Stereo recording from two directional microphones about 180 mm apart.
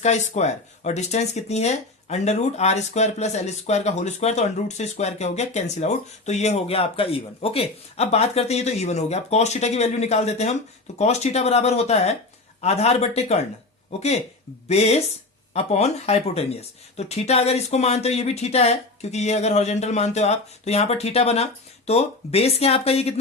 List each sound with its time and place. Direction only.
0.0 s a man's voice: 40° left (ahead or behind)
14.7 s a man's voice: 35° left (ahead or behind)